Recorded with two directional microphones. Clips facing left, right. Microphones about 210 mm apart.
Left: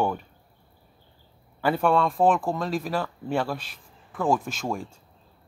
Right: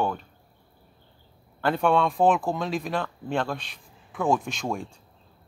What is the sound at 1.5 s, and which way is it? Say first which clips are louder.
Speech: even; 5° left (ahead or behind).